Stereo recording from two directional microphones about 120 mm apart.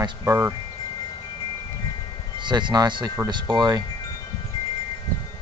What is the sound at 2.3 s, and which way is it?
Speech, 40° right (ahead or behind).